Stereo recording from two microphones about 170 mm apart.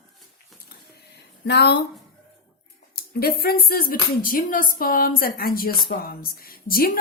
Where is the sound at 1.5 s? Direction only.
80° left.